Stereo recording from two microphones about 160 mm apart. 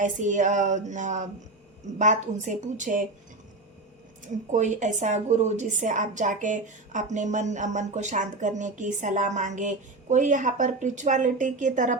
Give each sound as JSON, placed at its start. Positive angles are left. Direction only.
{"t": 0.0, "sound": "a woman's voice", "side_deg": -50}
{"t": 4.5, "sound": "a woman's voice", "side_deg": -50}